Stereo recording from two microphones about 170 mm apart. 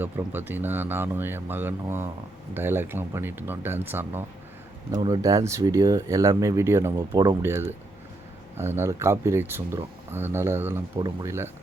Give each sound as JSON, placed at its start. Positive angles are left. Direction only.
{"t": 0.0, "sound": "speech", "side_deg": -10}
{"t": 4.9, "sound": "speech", "side_deg": -25}